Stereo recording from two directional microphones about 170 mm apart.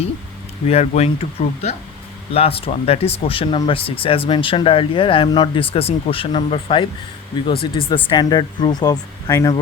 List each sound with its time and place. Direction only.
0.7 s speech: 35° left (ahead or behind); by 9.5 s 20° left (ahead or behind)